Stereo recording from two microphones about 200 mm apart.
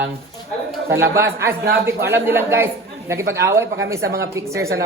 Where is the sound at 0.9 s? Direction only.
15° right (ahead or behind).